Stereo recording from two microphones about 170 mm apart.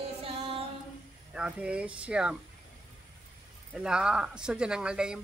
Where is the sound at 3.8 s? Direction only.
5° right (ahead or behind).